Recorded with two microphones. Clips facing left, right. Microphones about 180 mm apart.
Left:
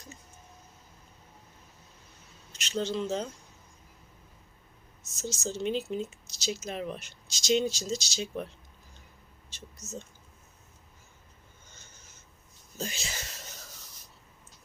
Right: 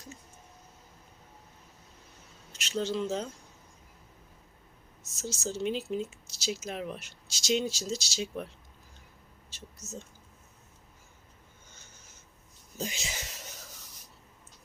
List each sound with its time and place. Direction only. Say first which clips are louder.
2.5 s speech: even; 5° right (ahead or behind)
5.2 s speech: even; 5° right (ahead or behind)
9.5 s speech: even; 5° right (ahead or behind)
12.7 s a sound: even; 15° right (ahead or behind)